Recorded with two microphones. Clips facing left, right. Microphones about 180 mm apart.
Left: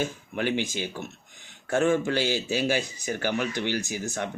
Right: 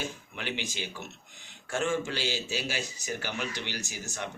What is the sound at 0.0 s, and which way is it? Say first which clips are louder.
A man's voice: left 9 dB; 50° left (ahead or behind).